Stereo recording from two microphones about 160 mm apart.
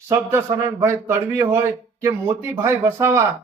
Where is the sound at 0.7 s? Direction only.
15° right (ahead or behind).